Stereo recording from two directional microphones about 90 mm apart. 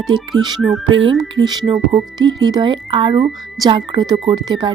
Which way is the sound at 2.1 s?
50° right (ahead or behind).